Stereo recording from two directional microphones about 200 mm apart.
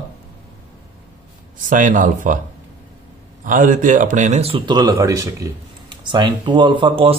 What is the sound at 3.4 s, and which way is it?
A man's voice, 40° right (ahead or behind).